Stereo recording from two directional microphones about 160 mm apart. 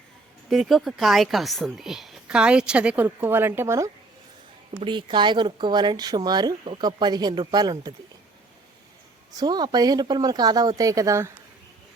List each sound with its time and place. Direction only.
0.5 s a woman's voice: centre (ahead or behind); by 3.8 s 15° right (ahead or behind)
4.7 s speech: 35° right (ahead or behind)
9.3 s speech: 25° right (ahead or behind)